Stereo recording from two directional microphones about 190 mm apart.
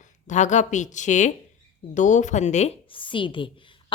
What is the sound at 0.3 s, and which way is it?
A woman's voice, 40° left (ahead or behind).